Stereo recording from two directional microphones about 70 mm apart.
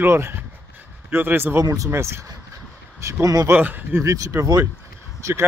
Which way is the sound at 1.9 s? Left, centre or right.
Right.